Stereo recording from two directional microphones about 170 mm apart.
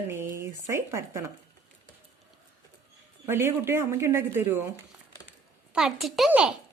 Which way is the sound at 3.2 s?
15° right (ahead or behind).